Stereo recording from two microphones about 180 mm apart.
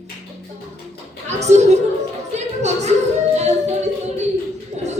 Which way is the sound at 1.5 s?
40° right (ahead or behind).